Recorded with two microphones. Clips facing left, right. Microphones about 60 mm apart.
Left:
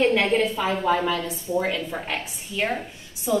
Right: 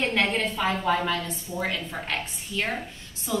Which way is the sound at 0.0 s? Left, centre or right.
Centre.